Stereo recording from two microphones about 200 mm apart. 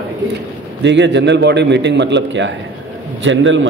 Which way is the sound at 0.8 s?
60° right (ahead or behind).